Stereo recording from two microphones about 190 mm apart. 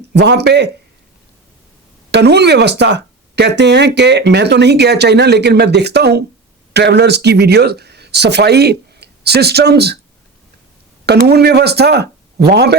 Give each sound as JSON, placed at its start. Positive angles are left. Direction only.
{"t": 0.1, "sound": "speech", "side_deg": -60}
{"t": 2.0, "sound": "speech", "side_deg": -60}
{"t": 11.0, "sound": "speech", "side_deg": -60}